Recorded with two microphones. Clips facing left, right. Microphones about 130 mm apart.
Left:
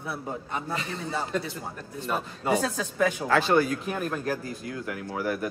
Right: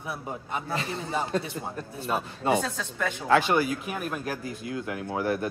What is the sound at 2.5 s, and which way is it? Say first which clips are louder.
Speech: left 3 dB; 5° left (ahead or behind).